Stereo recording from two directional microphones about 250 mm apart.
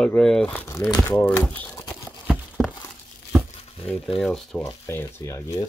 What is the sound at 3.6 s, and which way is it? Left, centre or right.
Crumpling, left.